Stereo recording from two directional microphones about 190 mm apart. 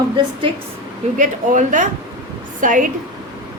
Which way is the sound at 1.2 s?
40° right (ahead or behind).